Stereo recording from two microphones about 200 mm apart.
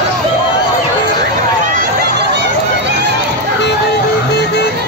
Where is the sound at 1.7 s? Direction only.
55° right (ahead or behind).